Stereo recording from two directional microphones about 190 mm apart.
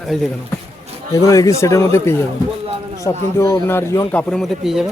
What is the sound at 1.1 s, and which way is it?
Speech, 15° left (ahead or behind).